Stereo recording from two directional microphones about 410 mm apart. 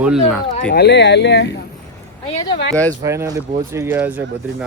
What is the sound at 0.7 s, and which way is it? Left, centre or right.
Speech, left.